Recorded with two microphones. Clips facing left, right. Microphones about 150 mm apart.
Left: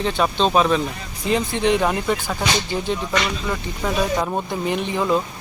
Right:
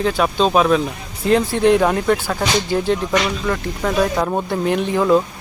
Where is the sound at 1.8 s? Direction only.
Centre (ahead or behind).